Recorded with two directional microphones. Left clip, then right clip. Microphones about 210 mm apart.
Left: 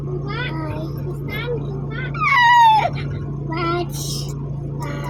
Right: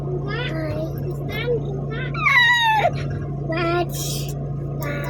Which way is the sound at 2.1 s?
45° left (ahead or behind).